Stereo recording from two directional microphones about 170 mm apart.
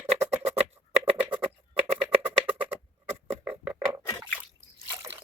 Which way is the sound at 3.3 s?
10° right (ahead or behind).